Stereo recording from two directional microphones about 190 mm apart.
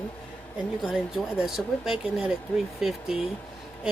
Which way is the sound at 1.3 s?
Centre (ahead or behind).